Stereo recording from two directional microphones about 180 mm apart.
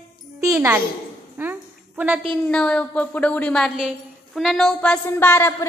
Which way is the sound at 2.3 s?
5° left (ahead or behind).